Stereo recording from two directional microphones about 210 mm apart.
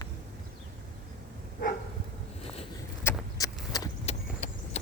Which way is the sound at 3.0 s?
10° left (ahead or behind).